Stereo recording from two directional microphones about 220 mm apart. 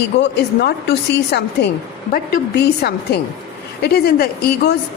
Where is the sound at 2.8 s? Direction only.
45° left (ahead or behind).